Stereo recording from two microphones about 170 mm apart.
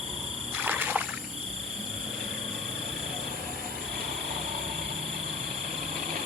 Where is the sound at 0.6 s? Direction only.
10° right (ahead or behind).